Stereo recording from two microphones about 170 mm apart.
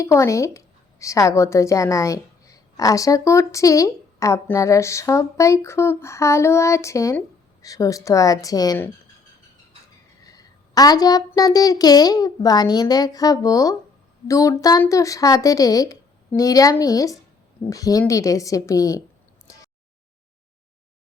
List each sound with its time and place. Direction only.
0.0 s a woman's voice: 15° left (ahead or behind)
10.2 s speech: 20° left (ahead or behind)